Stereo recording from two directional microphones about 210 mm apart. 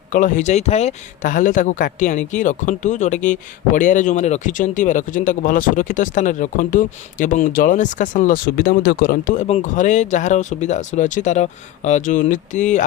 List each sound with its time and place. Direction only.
0.1 s speech: 35° left (ahead or behind)